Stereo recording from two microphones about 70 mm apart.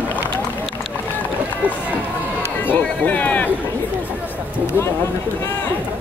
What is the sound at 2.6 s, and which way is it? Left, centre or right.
Run, left.